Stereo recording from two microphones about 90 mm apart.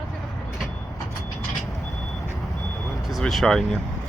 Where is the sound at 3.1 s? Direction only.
Centre (ahead or behind).